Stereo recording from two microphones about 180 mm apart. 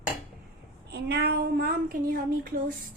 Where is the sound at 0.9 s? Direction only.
65° right (ahead or behind).